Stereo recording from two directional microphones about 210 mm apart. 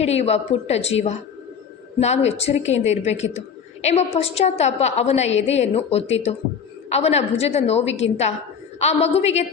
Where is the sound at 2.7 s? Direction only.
30° left (ahead or behind).